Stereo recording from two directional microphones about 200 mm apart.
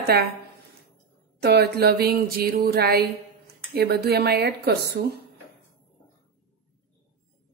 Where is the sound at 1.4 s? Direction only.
55° right (ahead or behind).